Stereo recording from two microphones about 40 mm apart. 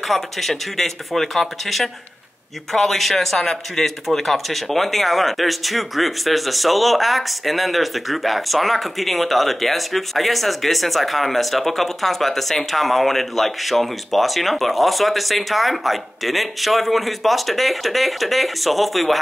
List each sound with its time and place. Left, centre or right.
0.1 s speech: centre